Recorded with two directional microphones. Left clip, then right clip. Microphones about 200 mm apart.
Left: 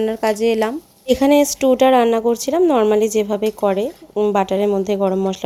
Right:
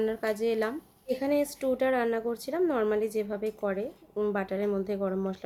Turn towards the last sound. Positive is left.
turn(degrees=30)  # may be behind; listen again after turning